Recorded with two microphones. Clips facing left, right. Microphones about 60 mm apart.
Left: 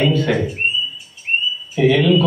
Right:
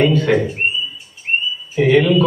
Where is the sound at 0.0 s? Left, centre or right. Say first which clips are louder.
Right 3 dB; right.